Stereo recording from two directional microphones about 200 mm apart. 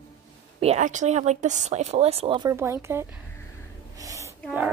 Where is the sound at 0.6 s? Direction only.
35° right (ahead or behind); by 3.2 s 15° right (ahead or behind).